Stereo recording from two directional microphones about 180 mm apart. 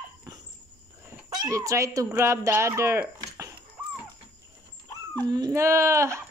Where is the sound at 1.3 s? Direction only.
20° right (ahead or behind).